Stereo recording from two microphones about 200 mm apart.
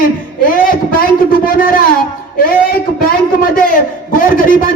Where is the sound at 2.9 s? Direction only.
45° left (ahead or behind).